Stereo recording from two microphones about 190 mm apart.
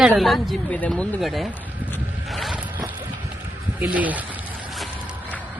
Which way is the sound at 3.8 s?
10° right (ahead or behind).